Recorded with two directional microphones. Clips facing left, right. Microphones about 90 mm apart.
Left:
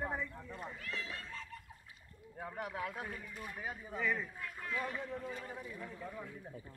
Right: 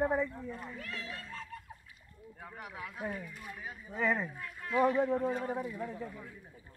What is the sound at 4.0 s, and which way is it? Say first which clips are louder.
Speech: right 5 dB; 65° right (ahead or behind).